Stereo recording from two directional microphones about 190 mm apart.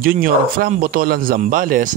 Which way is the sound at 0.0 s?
50° right (ahead or behind).